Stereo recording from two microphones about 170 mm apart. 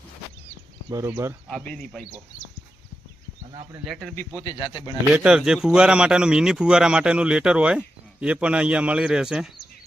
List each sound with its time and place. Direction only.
0.9 s speech: 20° right (ahead or behind)
1.5 s speech: 5° left (ahead or behind)
4.4 s speech: 25° left (ahead or behind)
5.1 s speech: 5° right (ahead or behind)